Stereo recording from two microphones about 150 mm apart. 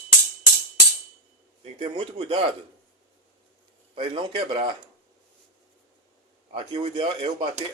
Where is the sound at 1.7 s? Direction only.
40° right (ahead or behind).